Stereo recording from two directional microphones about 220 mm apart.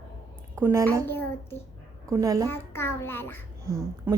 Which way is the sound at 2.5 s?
10° left (ahead or behind).